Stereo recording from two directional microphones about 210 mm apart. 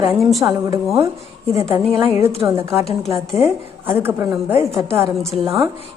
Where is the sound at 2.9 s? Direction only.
Centre (ahead or behind).